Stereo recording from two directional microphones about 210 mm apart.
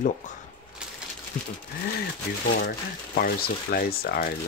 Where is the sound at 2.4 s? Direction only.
45° left (ahead or behind).